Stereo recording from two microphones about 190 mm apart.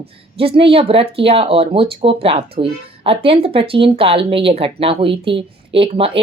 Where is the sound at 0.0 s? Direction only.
30° right (ahead or behind).